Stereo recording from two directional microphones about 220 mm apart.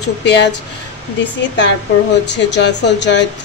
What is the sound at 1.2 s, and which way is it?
A woman's voice, 55° left (ahead or behind).